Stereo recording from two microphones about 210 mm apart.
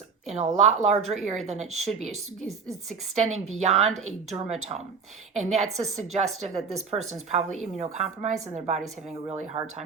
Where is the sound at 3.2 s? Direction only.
30° right (ahead or behind).